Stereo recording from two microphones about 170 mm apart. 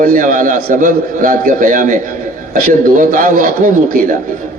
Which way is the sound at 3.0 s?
50° right (ahead or behind).